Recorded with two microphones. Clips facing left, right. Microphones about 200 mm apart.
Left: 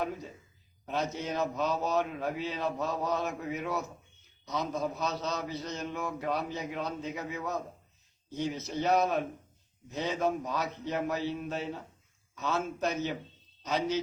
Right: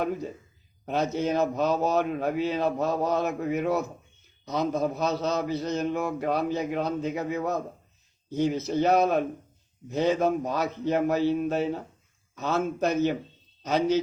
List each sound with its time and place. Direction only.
0.9 s a man's voice: 55° right (ahead or behind)